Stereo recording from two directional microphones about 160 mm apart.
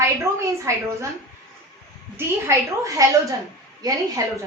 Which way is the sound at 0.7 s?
20° right (ahead or behind).